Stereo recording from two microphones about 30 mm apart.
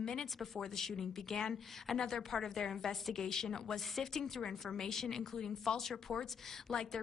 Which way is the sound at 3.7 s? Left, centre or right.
Centre.